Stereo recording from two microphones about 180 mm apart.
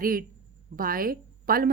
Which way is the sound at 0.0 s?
50° right (ahead or behind).